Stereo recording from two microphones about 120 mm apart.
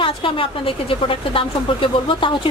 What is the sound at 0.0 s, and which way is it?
Speech, 45° left (ahead or behind).